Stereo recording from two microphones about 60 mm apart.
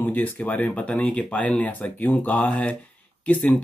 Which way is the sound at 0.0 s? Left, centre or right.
Left.